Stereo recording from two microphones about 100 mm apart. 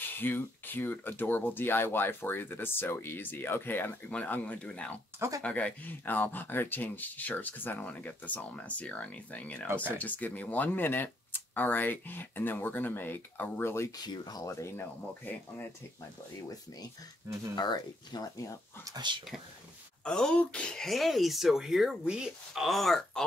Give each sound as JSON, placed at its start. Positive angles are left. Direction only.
{"t": 0.0, "sound": "speech", "side_deg": 20}
{"t": 14.0, "sound": "speech", "side_deg": 40}
{"t": 17.6, "sound": "speech", "side_deg": 45}
{"t": 18.9, "sound": "speech", "side_deg": -50}
{"t": 20.0, "sound": "speech", "side_deg": 5}